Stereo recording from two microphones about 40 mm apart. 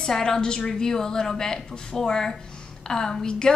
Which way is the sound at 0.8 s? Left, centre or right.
Centre.